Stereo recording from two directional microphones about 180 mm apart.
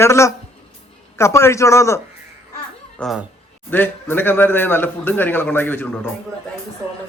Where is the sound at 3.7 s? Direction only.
10° left (ahead or behind).